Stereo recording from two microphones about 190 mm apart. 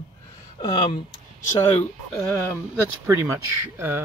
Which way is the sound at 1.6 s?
10° left (ahead or behind).